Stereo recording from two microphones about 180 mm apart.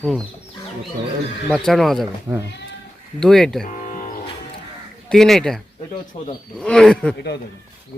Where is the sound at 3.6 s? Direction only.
45° left (ahead or behind).